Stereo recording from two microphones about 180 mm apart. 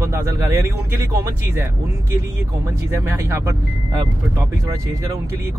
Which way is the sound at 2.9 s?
15° right (ahead or behind).